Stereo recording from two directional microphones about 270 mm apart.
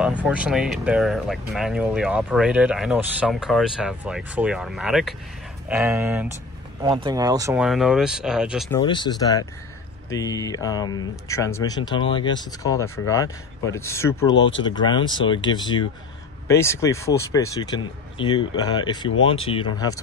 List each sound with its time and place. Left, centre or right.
0.0 s speech: centre
8.6 s speech: centre
14.3 s speech: left
14.6 s speech: centre
19.0 s speech: left
19.3 s speech: centre